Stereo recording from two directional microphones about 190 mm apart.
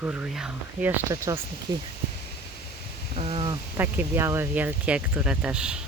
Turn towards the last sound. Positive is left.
turn(degrees=-5)  # may be behind; listen again after turning